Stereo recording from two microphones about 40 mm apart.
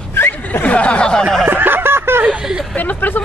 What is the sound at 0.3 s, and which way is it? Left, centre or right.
Snicker, left.